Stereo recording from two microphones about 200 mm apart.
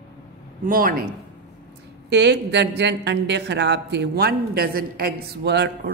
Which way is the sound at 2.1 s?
60° right (ahead or behind).